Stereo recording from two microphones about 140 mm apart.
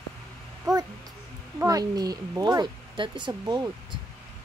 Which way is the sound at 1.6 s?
25° right (ahead or behind).